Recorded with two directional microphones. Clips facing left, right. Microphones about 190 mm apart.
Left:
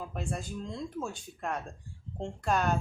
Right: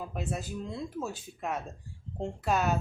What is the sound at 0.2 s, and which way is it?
Speech, 5° right (ahead or behind).